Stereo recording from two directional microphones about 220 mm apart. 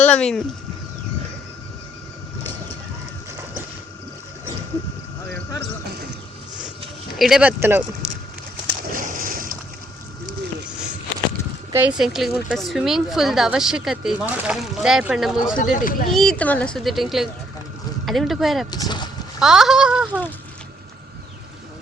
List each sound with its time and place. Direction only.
0.0 s a woman's voice: 5° left (ahead or behind)
7.2 s speech: 5° right (ahead or behind)
8.6 s a sound: 40° right (ahead or behind)
11.7 s a woman's voice: 5° right (ahead or behind)
15.5 s speech: 40° left (ahead or behind)
16.1 s a woman's voice: 5° left (ahead or behind)
18.7 s speech: 20° left (ahead or behind)
19.4 s a woman's voice: centre (ahead or behind)